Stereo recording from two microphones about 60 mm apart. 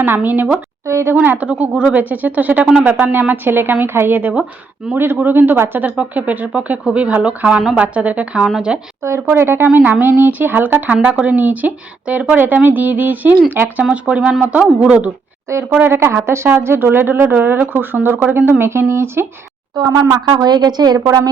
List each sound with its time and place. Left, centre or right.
0.0 s speech: right
0.9 s a sound: right
1.1 s speech: right
5.8 s speech: right
9.0 s speech: right
9.7 s speech: right
13.9 s speech: centre
15.8 s speech: right
18.6 s speech: right
19.8 s speech: right